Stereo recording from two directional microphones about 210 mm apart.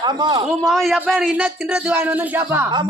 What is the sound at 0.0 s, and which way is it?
Speech, 20° right (ahead or behind).